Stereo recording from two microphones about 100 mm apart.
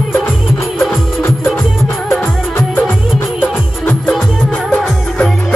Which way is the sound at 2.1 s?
20° left (ahead or behind).